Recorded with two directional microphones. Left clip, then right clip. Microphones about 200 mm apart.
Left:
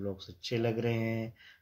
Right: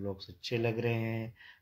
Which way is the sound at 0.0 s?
20° right (ahead or behind).